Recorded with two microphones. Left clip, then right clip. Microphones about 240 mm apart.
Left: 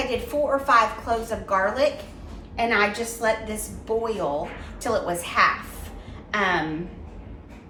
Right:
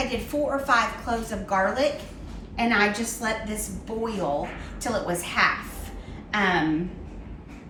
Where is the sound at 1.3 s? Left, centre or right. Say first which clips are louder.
Right 1 dB; left.